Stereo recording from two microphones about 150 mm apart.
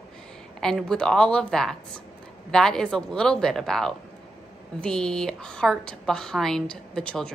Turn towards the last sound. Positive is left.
turn(degrees=5)  # may be behind; listen again after turning